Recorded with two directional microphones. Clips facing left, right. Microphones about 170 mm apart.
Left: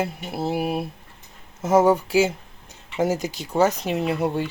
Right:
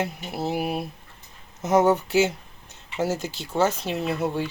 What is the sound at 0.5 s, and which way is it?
Speech, 5° left (ahead or behind).